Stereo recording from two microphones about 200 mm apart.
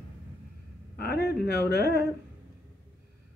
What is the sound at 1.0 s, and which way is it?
Speech, 50° left (ahead or behind).